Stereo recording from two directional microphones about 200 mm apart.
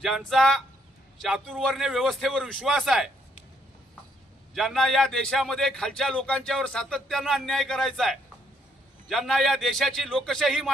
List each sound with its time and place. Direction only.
0.3 s a man's voice: centre (ahead or behind)
4.5 s a man's voice: centre (ahead or behind)